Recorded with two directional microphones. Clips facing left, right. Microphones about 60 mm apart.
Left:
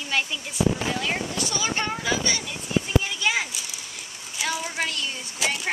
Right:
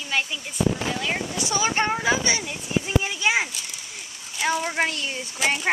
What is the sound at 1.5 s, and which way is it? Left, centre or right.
Speech, right.